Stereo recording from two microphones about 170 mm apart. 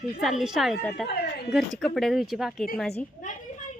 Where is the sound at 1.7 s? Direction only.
Centre (ahead or behind).